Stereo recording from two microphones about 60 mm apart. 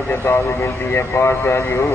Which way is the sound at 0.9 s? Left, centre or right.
Left.